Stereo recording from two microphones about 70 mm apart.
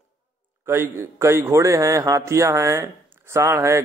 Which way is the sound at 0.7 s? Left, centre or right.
Right.